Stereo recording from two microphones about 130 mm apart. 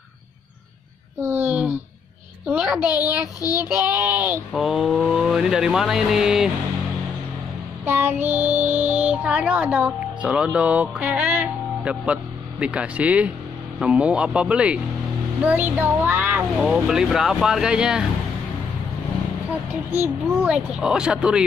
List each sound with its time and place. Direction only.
1.2 s a sound: 15° right (ahead or behind)
2.8 s child singing: 30° left (ahead or behind)
3.6 s speech: 10° right (ahead or behind)
4.5 s vehicle: centre (ahead or behind)
7.8 s music: 15° right (ahead or behind)
13.7 s speech: 10° right (ahead or behind)
16.5 s vehicle: centre (ahead or behind)
19.9 s speech: 15° right (ahead or behind)
20.5 s speech: 5° right (ahead or behind)